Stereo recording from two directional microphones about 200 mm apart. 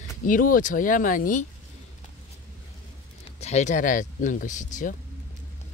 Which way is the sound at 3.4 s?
35° left (ahead or behind).